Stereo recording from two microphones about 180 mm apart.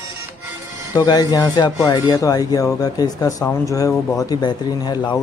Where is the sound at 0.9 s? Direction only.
20° left (ahead or behind).